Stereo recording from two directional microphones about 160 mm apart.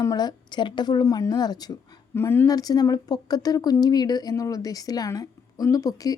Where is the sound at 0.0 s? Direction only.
25° left (ahead or behind).